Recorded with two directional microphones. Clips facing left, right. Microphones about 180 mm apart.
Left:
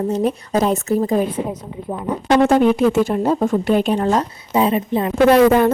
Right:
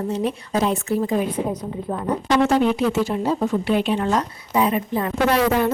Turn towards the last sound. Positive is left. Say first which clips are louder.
# left 7 dB
turn(degrees=55)  # may be behind; listen again after turning